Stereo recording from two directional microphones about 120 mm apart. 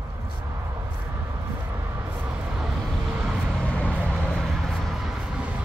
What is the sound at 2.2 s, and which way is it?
Vehicle, 10° right (ahead or behind).